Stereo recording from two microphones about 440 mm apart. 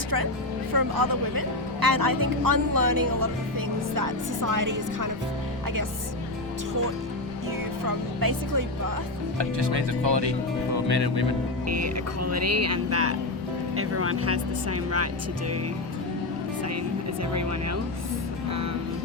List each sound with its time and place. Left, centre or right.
0.7 s speech: right
7.9 s speech: right
9.4 s speech: right
11.7 s speech: right